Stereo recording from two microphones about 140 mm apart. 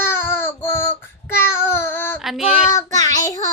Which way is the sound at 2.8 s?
25° left (ahead or behind).